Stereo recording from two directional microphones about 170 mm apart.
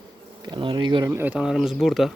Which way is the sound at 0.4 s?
25° right (ahead or behind).